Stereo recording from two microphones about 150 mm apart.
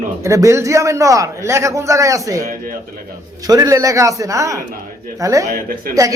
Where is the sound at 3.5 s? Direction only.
25° right (ahead or behind).